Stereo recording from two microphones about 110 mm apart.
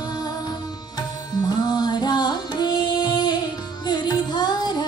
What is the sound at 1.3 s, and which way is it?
Music, 40° left (ahead or behind).